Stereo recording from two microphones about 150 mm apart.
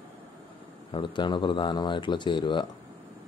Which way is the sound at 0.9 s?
30° left (ahead or behind).